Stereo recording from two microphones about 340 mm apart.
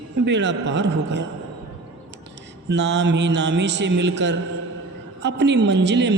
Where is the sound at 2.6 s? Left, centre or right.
Right.